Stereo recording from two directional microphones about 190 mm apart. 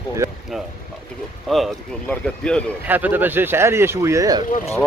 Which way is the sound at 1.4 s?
Centre (ahead or behind).